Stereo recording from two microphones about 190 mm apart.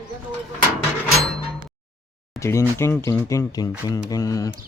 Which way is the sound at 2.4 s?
15° left (ahead or behind).